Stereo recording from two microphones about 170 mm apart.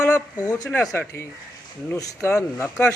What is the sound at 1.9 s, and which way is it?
Speech, 20° left (ahead or behind).